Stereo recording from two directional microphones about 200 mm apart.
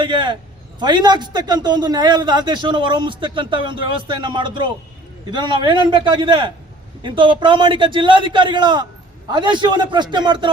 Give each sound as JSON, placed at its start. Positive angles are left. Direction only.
{"t": 0.0, "sound": "a man's voice", "side_deg": -25}